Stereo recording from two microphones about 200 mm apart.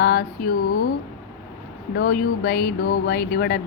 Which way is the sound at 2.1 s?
50° left (ahead or behind).